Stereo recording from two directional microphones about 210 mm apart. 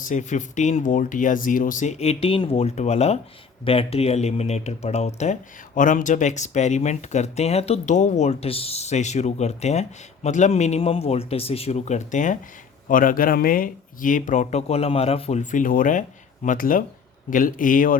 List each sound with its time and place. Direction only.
0.0 s speech: 35° left (ahead or behind)